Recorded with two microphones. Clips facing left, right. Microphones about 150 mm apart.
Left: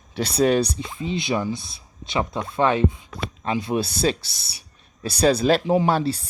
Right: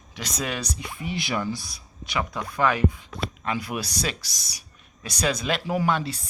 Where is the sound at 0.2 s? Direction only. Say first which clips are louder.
Left 12 dB; 30° left (ahead or behind).